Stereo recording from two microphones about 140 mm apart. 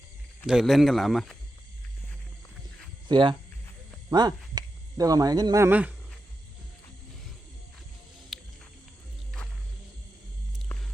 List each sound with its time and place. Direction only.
0.4 s speech: centre (ahead or behind)
3.1 s speech: 35° right (ahead or behind)
5.6 s speech: 10° right (ahead or behind)
8.3 s music: centre (ahead or behind)